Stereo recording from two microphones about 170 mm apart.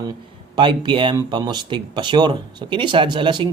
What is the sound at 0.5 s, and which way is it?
Speech, 25° right (ahead or behind).